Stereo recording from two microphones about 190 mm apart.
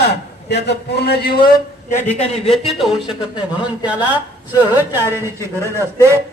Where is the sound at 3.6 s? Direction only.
5° right (ahead or behind).